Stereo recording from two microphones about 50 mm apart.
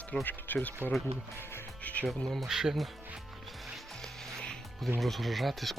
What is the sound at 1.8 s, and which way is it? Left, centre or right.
Music, left.